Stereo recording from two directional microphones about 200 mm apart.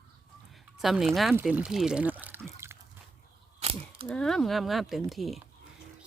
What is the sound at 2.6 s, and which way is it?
Drip, 15° right (ahead or behind).